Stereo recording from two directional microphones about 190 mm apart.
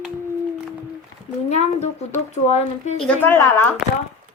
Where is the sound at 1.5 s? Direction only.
35° left (ahead or behind).